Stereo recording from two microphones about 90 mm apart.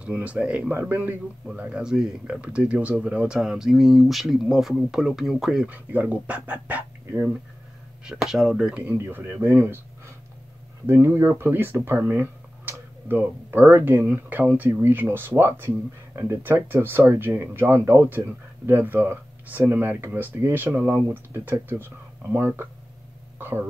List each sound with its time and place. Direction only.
0.0 s speech: 15° right (ahead or behind)
5.7 s speech: 20° right (ahead or behind)
8.0 s speech: 5° right (ahead or behind)
8.9 s speech: 25° right (ahead or behind)
10.9 s speech: 30° right (ahead or behind)